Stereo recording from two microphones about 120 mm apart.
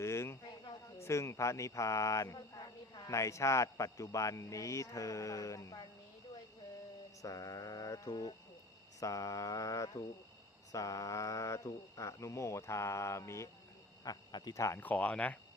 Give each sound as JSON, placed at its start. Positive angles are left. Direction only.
{"t": 0.0, "sound": "a sound", "side_deg": 20}
{"t": 1.0, "sound": "mantra", "side_deg": 25}
{"t": 7.2, "sound": "mantra", "side_deg": 30}
{"t": 14.0, "sound": "speech", "side_deg": 30}
{"t": 14.8, "sound": "speech", "side_deg": 15}